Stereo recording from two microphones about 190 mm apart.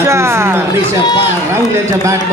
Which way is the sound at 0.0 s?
15° right (ahead or behind).